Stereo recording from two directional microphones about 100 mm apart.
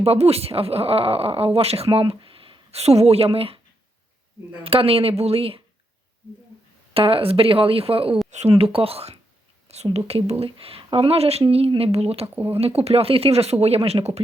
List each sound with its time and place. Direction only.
0.0 s speech: 90° right; by 1.5 s 75° right (ahead or behind)
1.5 s speech: 85° right
4.6 s speech: 70° right (ahead or behind)
6.9 s speech: 70° right (ahead or behind)
8.4 s speech: 85° right
10.4 s speech: 70° right (ahead or behind)
11.8 s speech: 90° right
12.3 s speech: 20° right (ahead or behind)
12.5 s speech: 90° right